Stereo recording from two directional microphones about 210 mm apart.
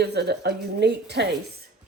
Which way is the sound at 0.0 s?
50° right (ahead or behind).